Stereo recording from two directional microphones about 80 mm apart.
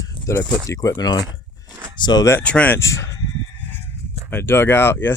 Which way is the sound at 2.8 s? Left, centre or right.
Left.